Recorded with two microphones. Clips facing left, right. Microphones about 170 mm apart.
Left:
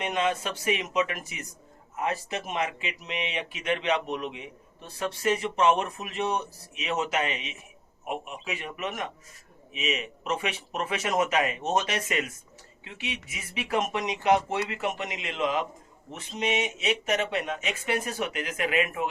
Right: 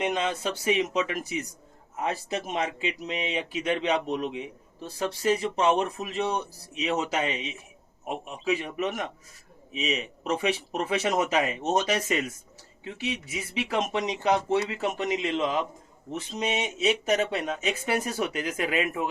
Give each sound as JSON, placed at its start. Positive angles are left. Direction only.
{"t": 0.1, "sound": "speech", "side_deg": -30}